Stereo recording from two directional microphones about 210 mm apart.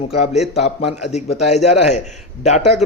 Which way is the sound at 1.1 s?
30° left (ahead or behind).